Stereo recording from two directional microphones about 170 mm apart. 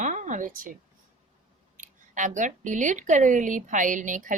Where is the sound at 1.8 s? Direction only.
50° right (ahead or behind).